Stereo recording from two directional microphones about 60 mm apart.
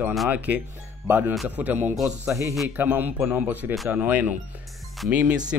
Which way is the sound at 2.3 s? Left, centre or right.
Right.